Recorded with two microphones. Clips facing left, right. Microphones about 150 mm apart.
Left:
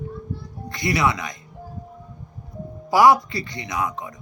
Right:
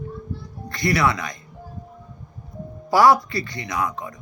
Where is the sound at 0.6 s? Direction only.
20° left (ahead or behind).